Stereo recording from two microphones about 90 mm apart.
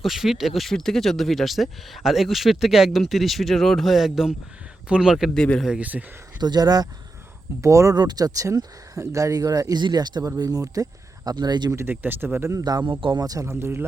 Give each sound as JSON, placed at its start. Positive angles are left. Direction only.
{"t": 0.0, "sound": "speech", "side_deg": -5}
{"t": 5.4, "sound": "speech", "side_deg": 10}
{"t": 5.8, "sound": "speech", "side_deg": -20}
{"t": 6.4, "sound": "speech", "side_deg": -50}
{"t": 7.6, "sound": "speech", "side_deg": -35}
{"t": 7.9, "sound": "speech", "side_deg": -50}
{"t": 11.7, "sound": "speech", "side_deg": -25}
{"t": 12.5, "sound": "speech", "side_deg": -45}
{"t": 12.8, "sound": "speech", "side_deg": -60}
{"t": 13.2, "sound": "speech", "side_deg": -45}
{"t": 13.5, "sound": "speech", "side_deg": -30}